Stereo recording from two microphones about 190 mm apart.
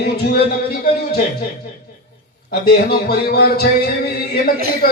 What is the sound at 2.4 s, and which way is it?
Speech, 55° left (ahead or behind).